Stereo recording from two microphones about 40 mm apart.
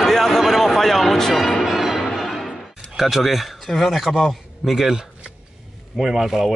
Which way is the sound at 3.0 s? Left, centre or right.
Centre.